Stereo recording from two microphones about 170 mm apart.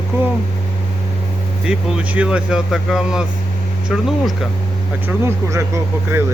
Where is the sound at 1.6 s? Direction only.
5° right (ahead or behind).